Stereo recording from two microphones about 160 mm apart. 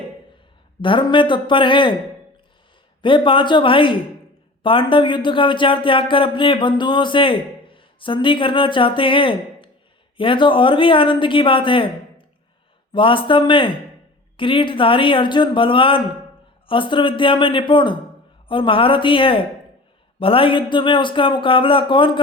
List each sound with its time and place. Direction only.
0.8 s speech: 30° left (ahead or behind)
3.0 s speech: 30° left (ahead or behind)